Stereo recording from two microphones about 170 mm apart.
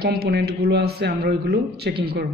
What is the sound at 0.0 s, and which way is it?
A man's voice, 65° right (ahead or behind).